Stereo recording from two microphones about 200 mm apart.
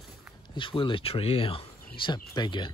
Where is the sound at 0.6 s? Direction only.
25° left (ahead or behind).